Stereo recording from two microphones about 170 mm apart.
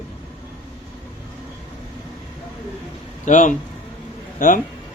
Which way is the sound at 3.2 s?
50° left (ahead or behind).